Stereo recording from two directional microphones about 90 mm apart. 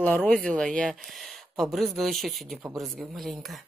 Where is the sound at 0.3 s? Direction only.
10° left (ahead or behind).